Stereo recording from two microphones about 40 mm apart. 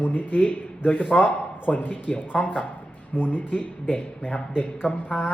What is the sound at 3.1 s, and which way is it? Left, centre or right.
A man's voice, left.